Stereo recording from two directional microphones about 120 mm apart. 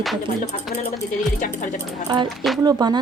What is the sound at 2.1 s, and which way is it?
Speech, 40° right (ahead or behind).